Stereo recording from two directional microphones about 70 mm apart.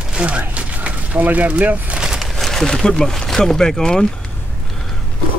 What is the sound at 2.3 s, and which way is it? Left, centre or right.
Speech, centre.